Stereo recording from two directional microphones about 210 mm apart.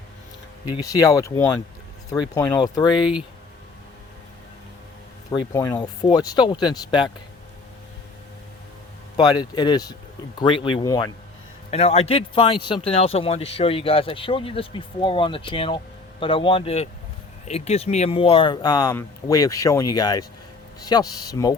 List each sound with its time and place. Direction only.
0.7 s speech: 15° left (ahead or behind)
5.3 s speech: 20° left (ahead or behind)
9.1 s speech: 20° left (ahead or behind)
11.7 s speech: 30° left (ahead or behind)